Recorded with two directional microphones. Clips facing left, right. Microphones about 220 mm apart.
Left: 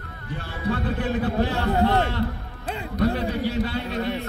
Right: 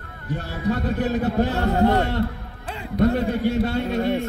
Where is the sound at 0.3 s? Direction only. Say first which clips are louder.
Right 3 dB; 45° right (ahead or behind).